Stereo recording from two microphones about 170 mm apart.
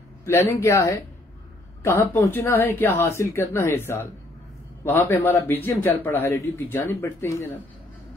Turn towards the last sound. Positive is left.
turn(degrees=15)  # may be behind; listen again after turning